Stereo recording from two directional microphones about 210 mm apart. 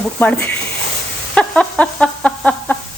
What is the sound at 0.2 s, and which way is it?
Speech, 5° left (ahead or behind).